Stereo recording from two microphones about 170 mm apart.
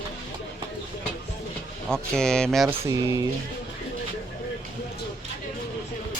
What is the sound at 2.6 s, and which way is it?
Speech, 15° right (ahead or behind).